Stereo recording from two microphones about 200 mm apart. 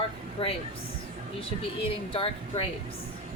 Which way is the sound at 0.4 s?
30° left (ahead or behind).